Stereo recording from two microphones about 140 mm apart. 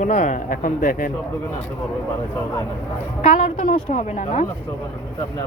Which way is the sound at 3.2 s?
60° left (ahead or behind).